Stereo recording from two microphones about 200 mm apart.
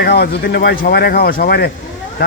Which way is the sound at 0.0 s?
55° left (ahead or behind).